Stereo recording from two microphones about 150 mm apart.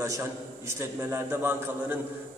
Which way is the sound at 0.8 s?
15° right (ahead or behind).